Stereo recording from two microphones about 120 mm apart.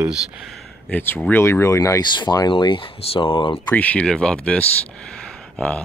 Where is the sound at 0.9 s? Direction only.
15° left (ahead or behind); by 3.6 s 50° left (ahead or behind).